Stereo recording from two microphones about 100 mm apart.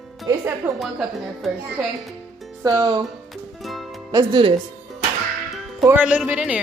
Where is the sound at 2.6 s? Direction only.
35° right (ahead or behind).